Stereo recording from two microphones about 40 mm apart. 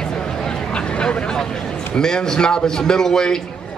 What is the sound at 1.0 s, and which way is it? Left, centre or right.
Vehicle, left.